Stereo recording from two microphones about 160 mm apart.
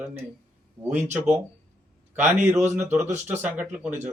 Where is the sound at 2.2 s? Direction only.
45° right (ahead or behind).